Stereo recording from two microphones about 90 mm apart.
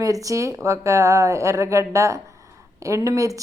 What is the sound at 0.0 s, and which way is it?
Speech, 40° right (ahead or behind).